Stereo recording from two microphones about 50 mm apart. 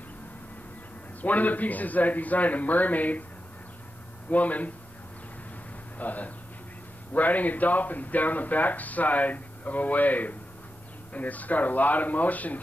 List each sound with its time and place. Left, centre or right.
1.2 s a man's voice: left
4.3 s a man's voice: left
5.9 s a man's voice: left